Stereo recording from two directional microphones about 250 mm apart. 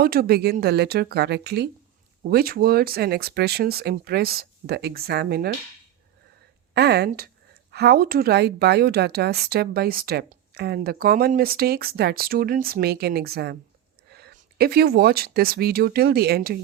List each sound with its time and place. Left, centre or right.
0.0 s a woman's voice: right
6.7 s a woman's voice: right